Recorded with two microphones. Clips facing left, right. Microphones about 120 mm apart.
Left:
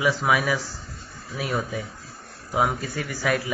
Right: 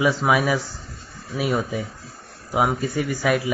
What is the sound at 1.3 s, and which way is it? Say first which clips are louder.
Mantra: right 4 dB; 15° right (ahead or behind).